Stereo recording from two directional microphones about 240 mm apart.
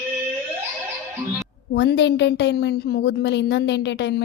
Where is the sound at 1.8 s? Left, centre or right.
Left.